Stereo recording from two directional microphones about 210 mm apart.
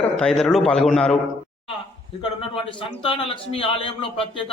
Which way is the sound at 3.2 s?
25° left (ahead or behind).